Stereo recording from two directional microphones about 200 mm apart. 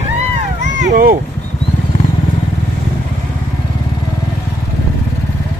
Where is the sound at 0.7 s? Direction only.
40° right (ahead or behind).